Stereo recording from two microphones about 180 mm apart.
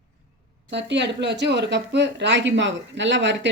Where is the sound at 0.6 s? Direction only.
75° right (ahead or behind).